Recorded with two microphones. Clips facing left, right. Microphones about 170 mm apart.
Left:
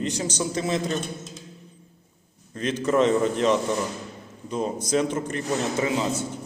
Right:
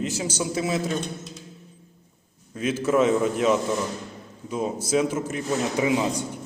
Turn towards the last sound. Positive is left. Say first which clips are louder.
# right 2 dB
turn(degrees=-15)  # may be behind; listen again after turning